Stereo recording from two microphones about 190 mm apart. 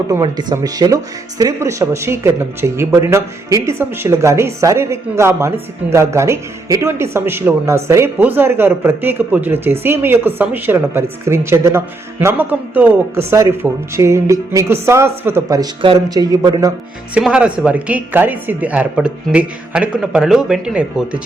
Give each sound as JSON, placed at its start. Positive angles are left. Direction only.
{"t": 0.1, "sound": "speech", "side_deg": -20}
{"t": 17.2, "sound": "speech", "side_deg": -5}